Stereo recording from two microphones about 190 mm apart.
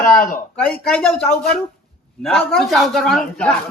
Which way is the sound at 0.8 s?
5° left (ahead or behind).